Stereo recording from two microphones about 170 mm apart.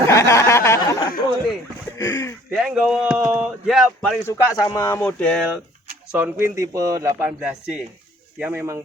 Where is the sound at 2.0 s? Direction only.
20° left (ahead or behind).